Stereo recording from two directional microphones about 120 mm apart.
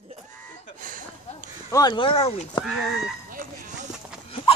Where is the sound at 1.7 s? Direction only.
30° left (ahead or behind).